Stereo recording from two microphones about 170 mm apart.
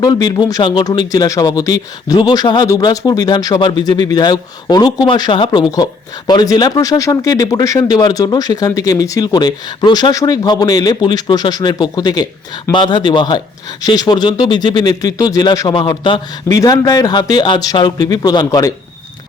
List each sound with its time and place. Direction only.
0.0 s speech: 25° left (ahead or behind)